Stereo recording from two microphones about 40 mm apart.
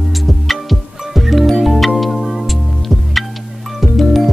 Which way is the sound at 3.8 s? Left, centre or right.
Centre.